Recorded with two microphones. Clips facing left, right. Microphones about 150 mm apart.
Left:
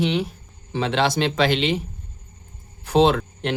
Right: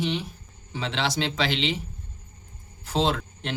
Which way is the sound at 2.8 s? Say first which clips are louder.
Left 8 dB; 60° left (ahead or behind).